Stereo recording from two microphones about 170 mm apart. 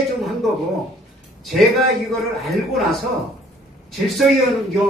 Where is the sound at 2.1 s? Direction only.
Centre (ahead or behind).